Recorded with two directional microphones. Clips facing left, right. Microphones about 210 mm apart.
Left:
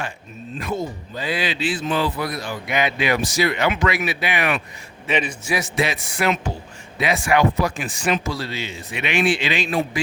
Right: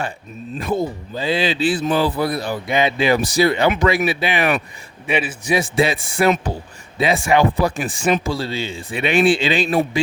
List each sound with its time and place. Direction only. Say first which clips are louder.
1.1 s speech: right 5 dB; 25° right (ahead or behind)
5.0 s a man's voice: right 2 dB; 10° right (ahead or behind)
5.5 s speech: right 7 dB; 30° right (ahead or behind)